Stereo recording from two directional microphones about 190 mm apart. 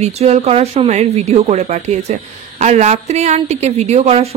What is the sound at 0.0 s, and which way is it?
A woman's voice, 35° right (ahead or behind).